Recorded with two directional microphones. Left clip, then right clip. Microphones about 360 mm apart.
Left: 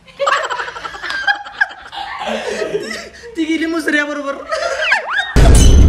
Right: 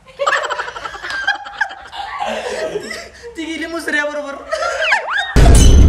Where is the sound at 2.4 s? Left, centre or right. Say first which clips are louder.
Left 2 dB; centre.